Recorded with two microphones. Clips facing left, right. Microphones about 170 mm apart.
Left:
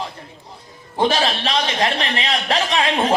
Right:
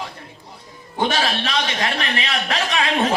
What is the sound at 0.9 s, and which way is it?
A man's voice, 30° left (ahead or behind).